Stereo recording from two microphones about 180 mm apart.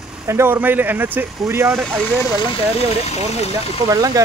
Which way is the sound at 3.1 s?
35° left (ahead or behind).